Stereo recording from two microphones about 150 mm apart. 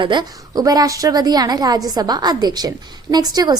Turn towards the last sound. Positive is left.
turn(degrees=-25)  # may be behind; listen again after turning